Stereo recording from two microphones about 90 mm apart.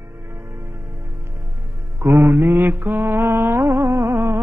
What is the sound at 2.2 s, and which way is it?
Mantra, 10° right (ahead or behind).